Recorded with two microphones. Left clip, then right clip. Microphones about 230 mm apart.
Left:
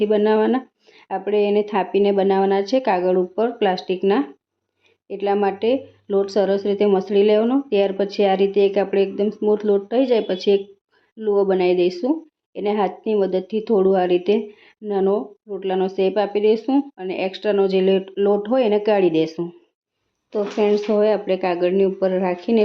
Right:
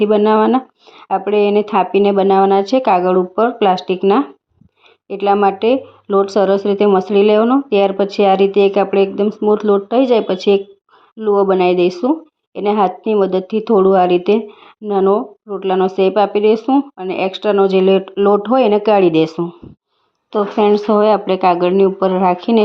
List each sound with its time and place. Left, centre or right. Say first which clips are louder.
0.0 s speech: right 5 dB; centre